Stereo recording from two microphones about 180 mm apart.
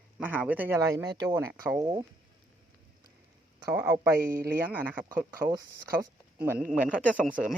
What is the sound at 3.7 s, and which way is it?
Speech, 15° right (ahead or behind).